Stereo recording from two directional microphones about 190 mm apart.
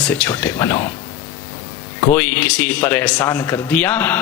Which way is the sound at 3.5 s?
10° left (ahead or behind).